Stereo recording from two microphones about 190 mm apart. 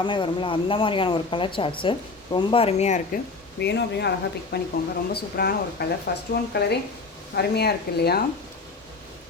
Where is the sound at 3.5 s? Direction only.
60° left (ahead or behind).